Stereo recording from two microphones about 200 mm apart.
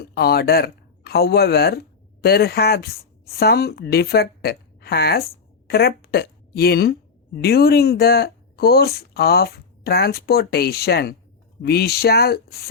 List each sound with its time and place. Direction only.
0.0 s a woman's voice: 50° left (ahead or behind)